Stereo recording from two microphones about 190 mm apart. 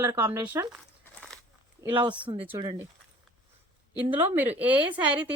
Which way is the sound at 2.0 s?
25° right (ahead or behind).